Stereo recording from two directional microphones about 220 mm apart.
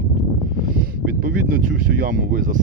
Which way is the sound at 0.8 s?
40° right (ahead or behind).